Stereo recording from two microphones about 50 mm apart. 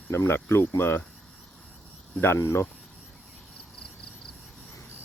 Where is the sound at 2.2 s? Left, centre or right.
Left.